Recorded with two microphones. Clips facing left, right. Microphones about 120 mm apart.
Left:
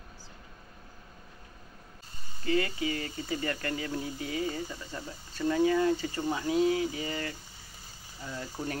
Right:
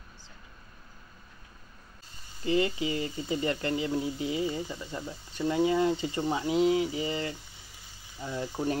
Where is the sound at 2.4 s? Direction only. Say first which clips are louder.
Right 2 dB; 20° right (ahead or behind).